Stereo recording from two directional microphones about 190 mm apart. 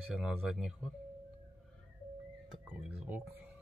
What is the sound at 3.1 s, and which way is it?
Music, 10° right (ahead or behind).